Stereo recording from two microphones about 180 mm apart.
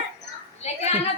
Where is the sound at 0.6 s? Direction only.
40° left (ahead or behind).